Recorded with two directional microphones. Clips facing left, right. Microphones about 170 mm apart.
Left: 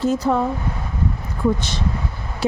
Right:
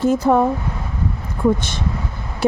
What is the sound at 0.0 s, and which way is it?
Speech, 50° right (ahead or behind).